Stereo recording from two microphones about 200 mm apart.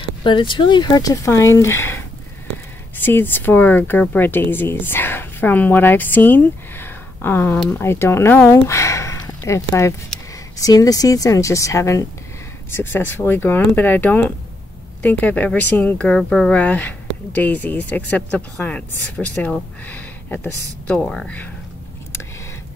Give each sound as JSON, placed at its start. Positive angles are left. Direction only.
{"t": 0.2, "sound": "speech", "side_deg": 25}